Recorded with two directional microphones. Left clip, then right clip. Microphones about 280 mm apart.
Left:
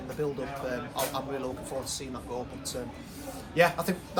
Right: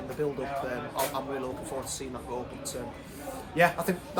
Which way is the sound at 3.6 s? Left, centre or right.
Centre.